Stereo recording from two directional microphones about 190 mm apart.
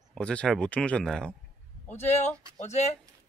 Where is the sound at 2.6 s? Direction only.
35° left (ahead or behind).